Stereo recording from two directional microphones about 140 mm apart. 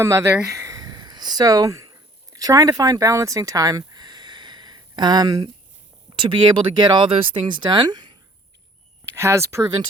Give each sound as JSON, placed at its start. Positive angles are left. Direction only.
{"t": 0.0, "sound": "speech", "side_deg": -20}
{"t": 0.6, "sound": "a sound", "side_deg": -25}
{"t": 2.3, "sound": "speech", "side_deg": -25}
{"t": 9.1, "sound": "speech", "side_deg": -20}